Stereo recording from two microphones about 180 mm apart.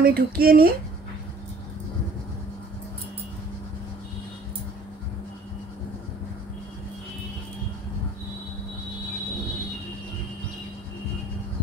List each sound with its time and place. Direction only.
0.0 s speech: 55° right (ahead or behind)